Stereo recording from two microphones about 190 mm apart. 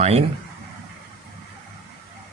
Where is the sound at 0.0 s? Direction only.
35° right (ahead or behind).